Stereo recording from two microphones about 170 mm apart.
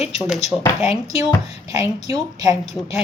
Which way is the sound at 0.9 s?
35° left (ahead or behind).